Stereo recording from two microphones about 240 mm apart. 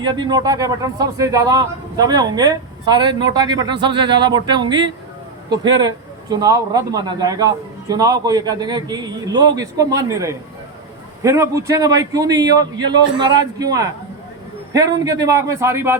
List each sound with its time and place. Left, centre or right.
0.0 s a man's voice: centre